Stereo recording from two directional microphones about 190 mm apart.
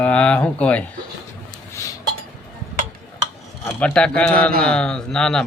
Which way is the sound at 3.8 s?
5° left (ahead or behind).